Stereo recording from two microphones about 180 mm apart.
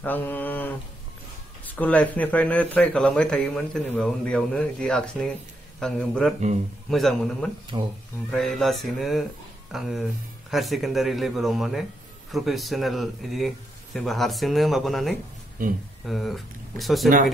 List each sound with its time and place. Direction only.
0.0 s speech: 10° left (ahead or behind)
7.7 s speech: 25° right (ahead or behind)
8.3 s speech: 5° left (ahead or behind)
15.6 s speech: 50° right (ahead or behind)
16.1 s speech: centre (ahead or behind)